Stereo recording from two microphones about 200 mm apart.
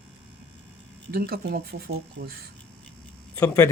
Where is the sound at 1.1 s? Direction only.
50° right (ahead or behind).